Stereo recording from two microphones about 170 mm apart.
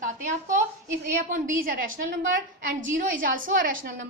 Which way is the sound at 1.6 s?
55° right (ahead or behind).